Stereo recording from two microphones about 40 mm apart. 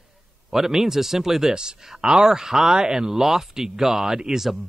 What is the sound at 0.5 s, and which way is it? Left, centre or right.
A man's voice, centre.